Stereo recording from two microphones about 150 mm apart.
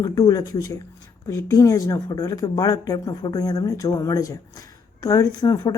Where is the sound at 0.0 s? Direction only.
25° left (ahead or behind).